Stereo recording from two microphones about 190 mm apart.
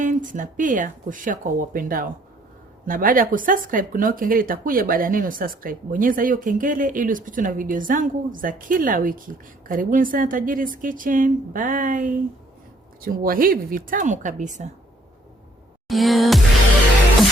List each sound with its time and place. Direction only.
0.0 s speech: 45° right (ahead or behind)
15.9 s music: centre (ahead or behind)